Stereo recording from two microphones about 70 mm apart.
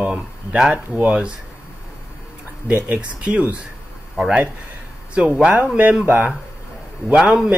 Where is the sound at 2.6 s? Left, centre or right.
Centre.